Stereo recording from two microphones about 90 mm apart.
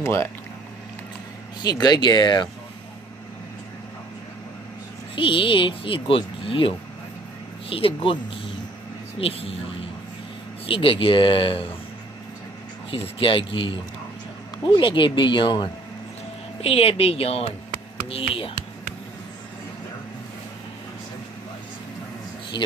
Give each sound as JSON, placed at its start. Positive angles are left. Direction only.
{"t": 0.0, "sound": "speech", "side_deg": 30}
{"t": 1.6, "sound": "speech", "side_deg": 50}
{"t": 5.1, "sound": "speech", "side_deg": 70}
{"t": 7.7, "sound": "speech", "side_deg": 85}
{"t": 9.2, "sound": "speech", "side_deg": 90}
{"t": 10.7, "sound": "speech", "side_deg": 80}
{"t": 12.9, "sound": "speech", "side_deg": 85}
{"t": 14.6, "sound": "speech", "side_deg": 65}
{"t": 16.6, "sound": "speech", "side_deg": 90}
{"t": 22.5, "sound": "speech", "side_deg": 60}